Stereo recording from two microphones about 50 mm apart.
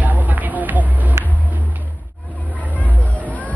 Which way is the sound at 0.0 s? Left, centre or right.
Right.